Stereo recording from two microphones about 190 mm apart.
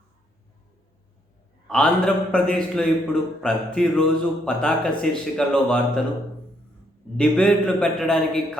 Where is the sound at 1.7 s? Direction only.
5° left (ahead or behind).